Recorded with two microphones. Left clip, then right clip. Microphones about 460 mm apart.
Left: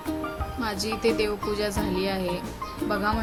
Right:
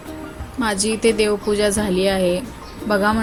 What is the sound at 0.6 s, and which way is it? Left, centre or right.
A woman's voice, left.